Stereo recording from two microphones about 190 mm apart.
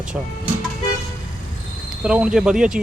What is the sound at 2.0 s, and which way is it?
Speech, 5° right (ahead or behind).